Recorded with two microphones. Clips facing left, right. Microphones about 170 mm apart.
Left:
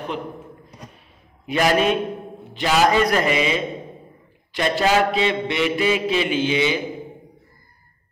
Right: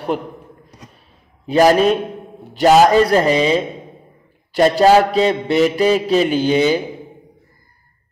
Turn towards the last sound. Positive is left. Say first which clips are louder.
# right 6 dB
turn(degrees=-40)  # may be behind; listen again after turning